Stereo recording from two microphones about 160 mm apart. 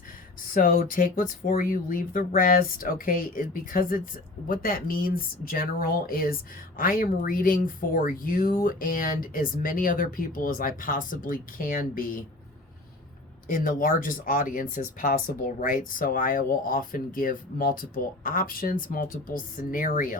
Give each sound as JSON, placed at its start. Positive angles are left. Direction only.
{"t": 0.5, "sound": "speech", "side_deg": 60}
{"t": 13.5, "sound": "speech", "side_deg": 55}